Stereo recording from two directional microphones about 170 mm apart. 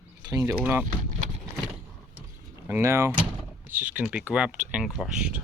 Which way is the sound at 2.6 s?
15° right (ahead or behind).